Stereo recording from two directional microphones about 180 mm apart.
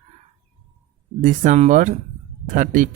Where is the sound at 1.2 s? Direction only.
45° right (ahead or behind).